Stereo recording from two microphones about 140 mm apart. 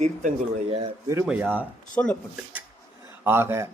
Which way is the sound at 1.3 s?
10° right (ahead or behind).